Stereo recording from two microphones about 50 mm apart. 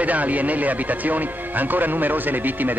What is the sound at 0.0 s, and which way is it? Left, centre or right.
Speech, right.